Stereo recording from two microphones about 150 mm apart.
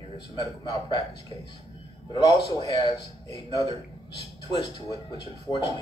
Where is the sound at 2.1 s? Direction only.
30° left (ahead or behind).